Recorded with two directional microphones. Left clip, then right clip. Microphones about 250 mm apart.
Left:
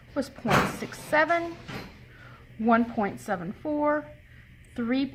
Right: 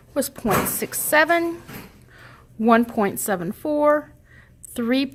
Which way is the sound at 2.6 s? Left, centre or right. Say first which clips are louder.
Right 6 dB; right.